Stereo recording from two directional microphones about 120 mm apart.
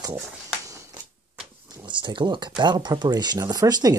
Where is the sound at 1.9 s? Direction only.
40° right (ahead or behind).